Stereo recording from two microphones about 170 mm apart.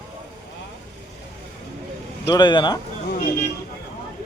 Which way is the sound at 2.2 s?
25° left (ahead or behind).